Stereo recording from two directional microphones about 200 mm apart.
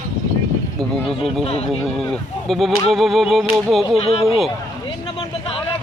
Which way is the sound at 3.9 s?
30° left (ahead or behind).